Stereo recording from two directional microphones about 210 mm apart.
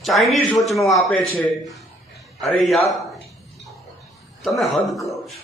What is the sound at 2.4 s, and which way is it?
Speech, centre (ahead or behind).